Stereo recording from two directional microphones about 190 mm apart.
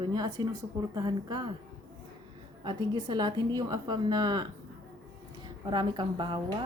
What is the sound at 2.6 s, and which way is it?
A woman's voice, 25° right (ahead or behind).